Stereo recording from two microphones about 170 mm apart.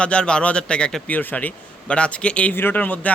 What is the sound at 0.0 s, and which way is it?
A man's voice, 5° left (ahead or behind).